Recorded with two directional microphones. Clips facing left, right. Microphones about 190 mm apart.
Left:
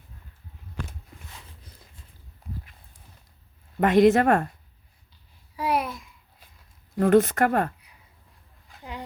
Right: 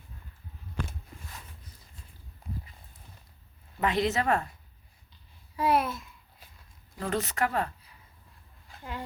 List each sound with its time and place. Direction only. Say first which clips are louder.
3.8 s speech: left 10 dB; 50° left (ahead or behind)
5.5 s babbling: even; 10° left (ahead or behind)
6.9 s speech: left 13 dB; 55° left (ahead or behind)
8.8 s a sound: left 1 dB; 15° left (ahead or behind)